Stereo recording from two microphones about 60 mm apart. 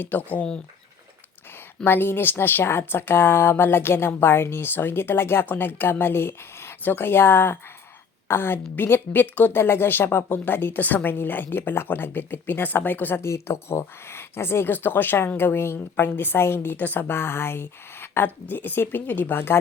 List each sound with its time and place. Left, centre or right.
0.0 s speech: left
1.8 s speech: left
13.2 s speech: left